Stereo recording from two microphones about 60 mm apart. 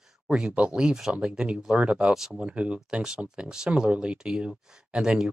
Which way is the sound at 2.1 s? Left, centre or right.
Centre.